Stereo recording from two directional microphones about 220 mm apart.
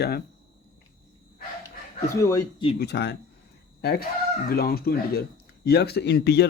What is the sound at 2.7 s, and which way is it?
Speech, 50° left (ahead or behind).